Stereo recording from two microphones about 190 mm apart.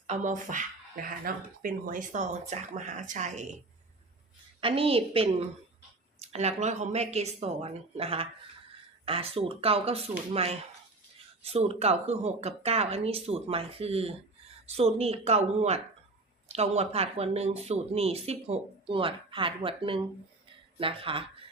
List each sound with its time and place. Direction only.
0.1 s speech: 40° right (ahead or behind)
4.6 s a woman's voice: 30° right (ahead or behind)